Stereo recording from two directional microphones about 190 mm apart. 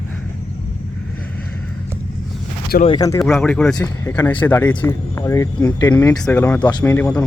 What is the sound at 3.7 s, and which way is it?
Speech, 20° left (ahead or behind).